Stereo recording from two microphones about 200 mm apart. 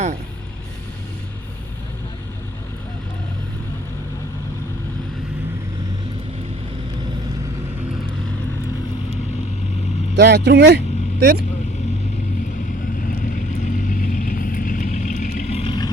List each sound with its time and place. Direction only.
10.2 s speech: 55° right (ahead or behind)
13.1 s vehicle: 40° left (ahead or behind); by 15.9 s 25° left (ahead or behind)